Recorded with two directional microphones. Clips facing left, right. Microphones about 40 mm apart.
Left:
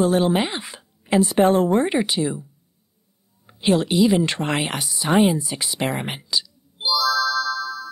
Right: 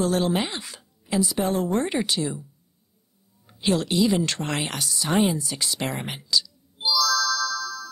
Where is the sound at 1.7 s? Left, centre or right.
Centre.